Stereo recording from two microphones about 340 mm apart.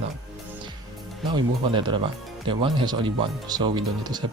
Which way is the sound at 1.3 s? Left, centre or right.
Centre.